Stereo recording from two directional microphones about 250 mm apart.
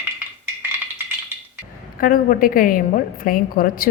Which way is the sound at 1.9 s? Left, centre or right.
Left.